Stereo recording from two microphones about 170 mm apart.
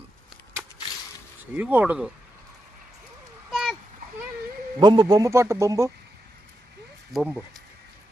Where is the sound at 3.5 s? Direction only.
Centre (ahead or behind).